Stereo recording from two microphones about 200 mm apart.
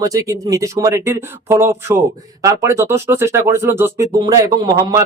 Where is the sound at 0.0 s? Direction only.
15° right (ahead or behind).